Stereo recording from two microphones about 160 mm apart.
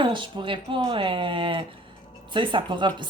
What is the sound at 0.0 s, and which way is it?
Speech, 30° right (ahead or behind).